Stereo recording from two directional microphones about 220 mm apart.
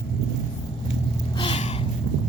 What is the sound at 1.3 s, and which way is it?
Gasp, 25° left (ahead or behind).